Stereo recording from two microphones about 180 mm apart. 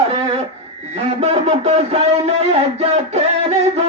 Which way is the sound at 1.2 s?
35° right (ahead or behind).